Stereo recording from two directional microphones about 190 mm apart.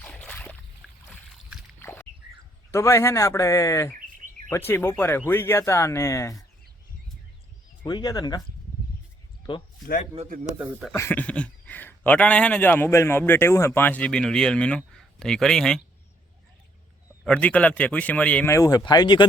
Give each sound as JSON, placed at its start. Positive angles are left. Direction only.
{"t": 0.0, "sound": "a sound", "side_deg": 5}
{"t": 1.0, "sound": "boat", "side_deg": 5}
{"t": 1.8, "sound": "a sound", "side_deg": 10}
{"t": 2.7, "sound": "a man's voice", "side_deg": 15}
{"t": 7.9, "sound": "speech", "side_deg": 20}
{"t": 9.5, "sound": "speech", "side_deg": 25}
{"t": 9.8, "sound": "a man's voice", "side_deg": 45}
{"t": 10.6, "sound": "speech", "side_deg": -10}
{"t": 10.9, "sound": "a man's voice", "side_deg": 10}
{"t": 17.2, "sound": "a man's voice", "side_deg": 5}